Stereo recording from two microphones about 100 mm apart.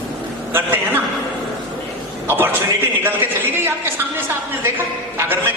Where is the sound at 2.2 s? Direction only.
20° right (ahead or behind).